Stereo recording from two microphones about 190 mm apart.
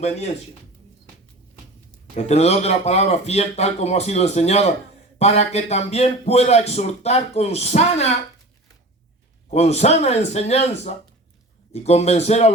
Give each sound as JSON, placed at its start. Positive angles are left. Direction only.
{"t": 2.1, "sound": "speech", "side_deg": 35}
{"t": 9.5, "sound": "speech", "side_deg": 35}